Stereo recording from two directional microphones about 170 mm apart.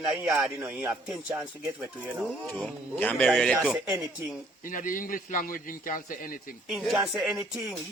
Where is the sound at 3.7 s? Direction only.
10° right (ahead or behind).